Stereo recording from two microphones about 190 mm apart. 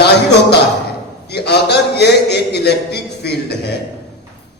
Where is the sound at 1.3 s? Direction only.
60° left (ahead or behind).